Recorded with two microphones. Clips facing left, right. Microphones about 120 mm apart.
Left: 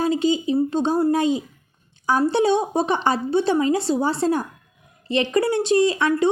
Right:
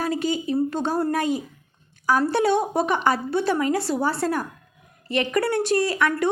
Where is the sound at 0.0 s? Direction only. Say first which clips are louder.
Left 4 dB; 25° left (ahead or behind).